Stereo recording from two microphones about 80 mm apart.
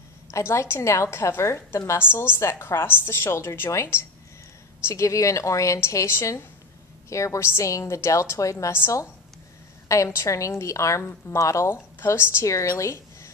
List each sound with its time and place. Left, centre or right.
0.3 s a woman's voice: left